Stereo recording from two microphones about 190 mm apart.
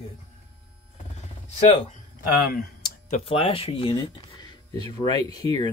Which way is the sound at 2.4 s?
50° left (ahead or behind).